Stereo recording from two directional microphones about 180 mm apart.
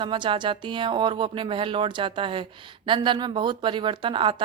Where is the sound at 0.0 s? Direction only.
25° right (ahead or behind).